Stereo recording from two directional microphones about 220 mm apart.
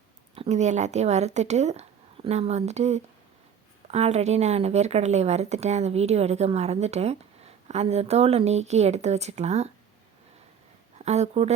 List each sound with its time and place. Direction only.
0.3 s speech: 30° right (ahead or behind)
10.9 s speech: 30° right (ahead or behind)